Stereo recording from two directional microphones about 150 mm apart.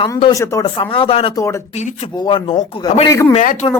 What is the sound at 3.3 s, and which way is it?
Speech, 60° left (ahead or behind).